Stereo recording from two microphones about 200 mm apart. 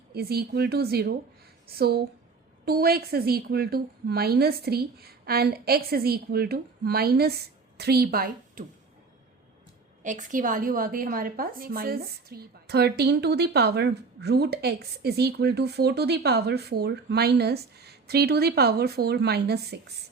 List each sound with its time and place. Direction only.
0.1 s a woman's voice: 50° right (ahead or behind)
10.0 s a woman's voice: 40° right (ahead or behind)